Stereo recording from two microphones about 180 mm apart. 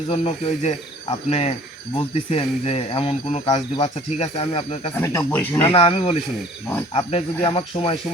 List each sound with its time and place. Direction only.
0.1 s speech: 40° left (ahead or behind)
4.9 s speech: 15° left (ahead or behind)
5.6 s speech: 35° left (ahead or behind)